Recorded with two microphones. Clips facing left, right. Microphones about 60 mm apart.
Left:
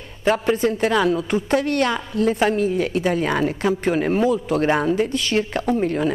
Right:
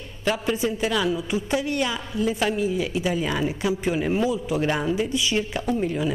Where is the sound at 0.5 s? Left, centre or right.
Left.